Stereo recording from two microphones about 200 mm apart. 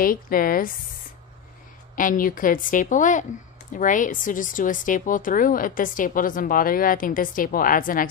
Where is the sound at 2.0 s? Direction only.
40° left (ahead or behind).